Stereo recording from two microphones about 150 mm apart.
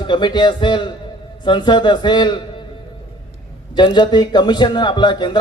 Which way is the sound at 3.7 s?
30° left (ahead or behind).